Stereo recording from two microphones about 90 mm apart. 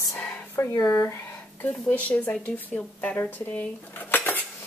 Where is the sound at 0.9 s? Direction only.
25° left (ahead or behind).